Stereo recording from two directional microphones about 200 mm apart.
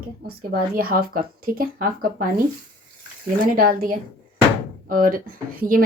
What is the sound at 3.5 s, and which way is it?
Speech, 45° right (ahead or behind).